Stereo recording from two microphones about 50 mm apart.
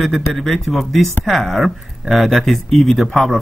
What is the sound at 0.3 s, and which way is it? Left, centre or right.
Speech, centre.